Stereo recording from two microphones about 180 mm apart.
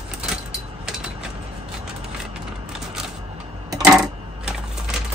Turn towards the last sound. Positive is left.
turn(degrees=0)  # may be behind; listen again after turning